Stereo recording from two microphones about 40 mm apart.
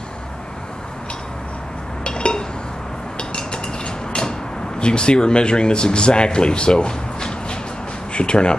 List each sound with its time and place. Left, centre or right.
2.0 s a sound: left
3.2 s dishes: left
4.7 s speech: left